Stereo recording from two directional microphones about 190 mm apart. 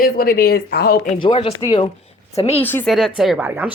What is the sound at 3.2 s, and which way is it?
Speech, 5° right (ahead or behind).